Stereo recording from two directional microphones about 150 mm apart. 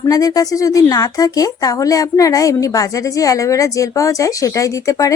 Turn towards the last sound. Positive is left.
turn(degrees=20)  # may be behind; listen again after turning